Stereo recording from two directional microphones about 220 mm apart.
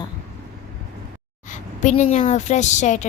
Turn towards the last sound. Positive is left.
turn(degrees=35)  # may be behind; listen again after turning